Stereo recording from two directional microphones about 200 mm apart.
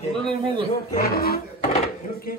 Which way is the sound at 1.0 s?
50° left (ahead or behind).